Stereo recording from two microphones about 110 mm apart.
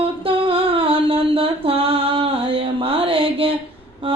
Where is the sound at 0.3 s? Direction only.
55° right (ahead or behind).